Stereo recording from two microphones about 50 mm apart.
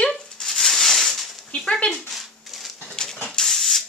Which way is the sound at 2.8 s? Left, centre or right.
Centre.